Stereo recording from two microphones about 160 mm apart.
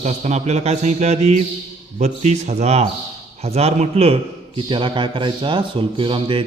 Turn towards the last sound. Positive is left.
turn(degrees=-30)  # may be behind; listen again after turning